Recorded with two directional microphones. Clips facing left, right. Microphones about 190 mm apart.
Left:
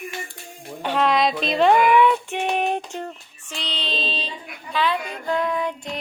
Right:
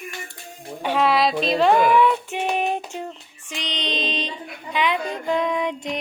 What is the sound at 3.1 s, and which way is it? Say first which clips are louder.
Child singing: right 1 dB; 15° right (ahead or behind).